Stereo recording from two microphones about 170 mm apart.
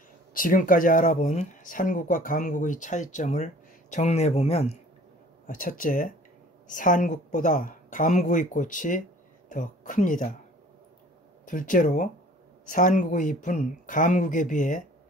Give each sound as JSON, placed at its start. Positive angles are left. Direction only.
{"t": 0.3, "sound": "speech", "side_deg": 55}
{"t": 5.5, "sound": "speech", "side_deg": 55}
{"t": 11.4, "sound": "speech", "side_deg": 50}